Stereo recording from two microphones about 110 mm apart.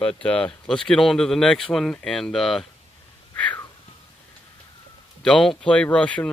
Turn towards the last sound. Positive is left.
turn(degrees=10)  # may be behind; listen again after turning